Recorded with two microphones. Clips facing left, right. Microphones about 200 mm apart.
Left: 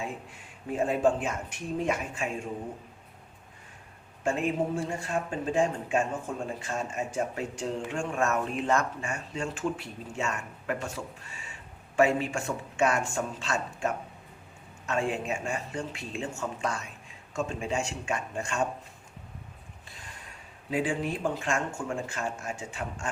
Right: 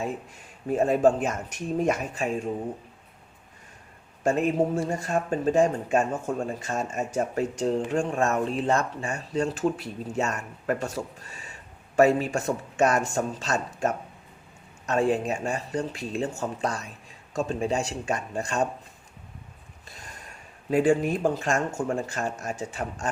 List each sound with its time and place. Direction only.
0.7 s speech: 40° right (ahead or behind)
4.2 s speech: 40° right (ahead or behind)
20.7 s speech: 45° right (ahead or behind)